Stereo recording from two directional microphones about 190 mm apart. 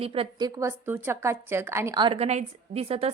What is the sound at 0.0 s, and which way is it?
A woman's voice, 30° right (ahead or behind).